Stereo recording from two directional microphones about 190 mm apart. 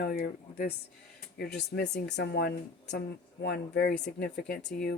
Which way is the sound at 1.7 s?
60° left (ahead or behind).